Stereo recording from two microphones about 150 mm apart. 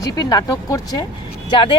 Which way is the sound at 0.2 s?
25° left (ahead or behind).